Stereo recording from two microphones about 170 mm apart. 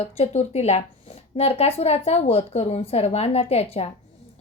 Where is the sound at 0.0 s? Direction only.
40° left (ahead or behind).